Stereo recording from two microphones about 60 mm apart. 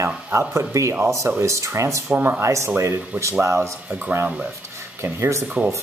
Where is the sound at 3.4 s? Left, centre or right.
Right.